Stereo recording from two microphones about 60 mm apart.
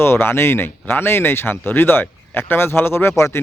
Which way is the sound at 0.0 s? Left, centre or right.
Left.